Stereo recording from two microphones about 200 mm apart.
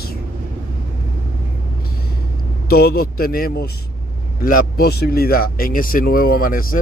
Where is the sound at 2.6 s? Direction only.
50° left (ahead or behind).